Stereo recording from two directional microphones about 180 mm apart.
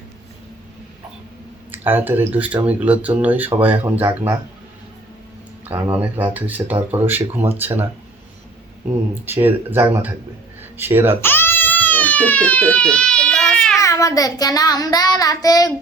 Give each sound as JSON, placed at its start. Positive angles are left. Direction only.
{"t": 1.7, "sound": "speech", "side_deg": -10}
{"t": 5.6, "sound": "speech", "side_deg": -10}
{"t": 9.1, "sound": "speech", "side_deg": -10}
{"t": 11.2, "sound": "crying", "side_deg": 10}
{"t": 13.8, "sound": "child singing", "side_deg": 20}